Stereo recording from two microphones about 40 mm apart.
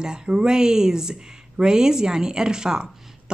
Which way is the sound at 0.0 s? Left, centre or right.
Centre.